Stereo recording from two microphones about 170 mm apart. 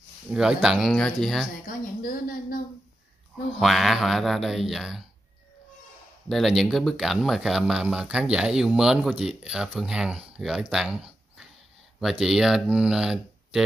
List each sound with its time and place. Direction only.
0.3 s speech: 5° right (ahead or behind)
2.0 s a woman's voice: 55° left (ahead or behind)
3.5 s speech: centre (ahead or behind)
6.2 s speech: centre (ahead or behind)